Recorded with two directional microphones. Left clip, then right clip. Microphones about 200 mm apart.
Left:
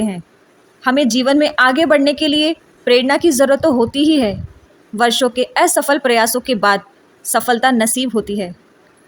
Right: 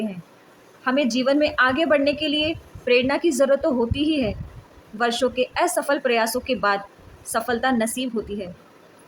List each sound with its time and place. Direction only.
0.9 s a woman's voice: 40° left (ahead or behind)